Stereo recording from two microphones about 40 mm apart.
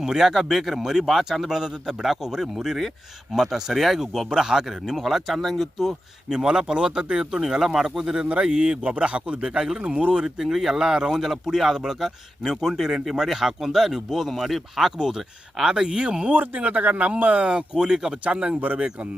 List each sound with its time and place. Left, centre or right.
0.0 s speech: centre
5.9 s speech: centre
7.4 s speech: centre
8.8 s a man's voice: right
10.3 s speech: centre
15.5 s speech: centre
16.3 s a man's voice: right
17.4 s speech: right
17.8 s speech: centre
18.3 s speech: right